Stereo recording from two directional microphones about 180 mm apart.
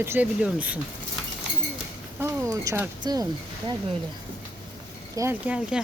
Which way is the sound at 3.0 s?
20° right (ahead or behind).